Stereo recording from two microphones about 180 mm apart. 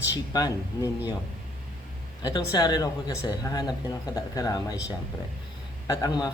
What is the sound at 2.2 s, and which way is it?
Speech, 20° left (ahead or behind).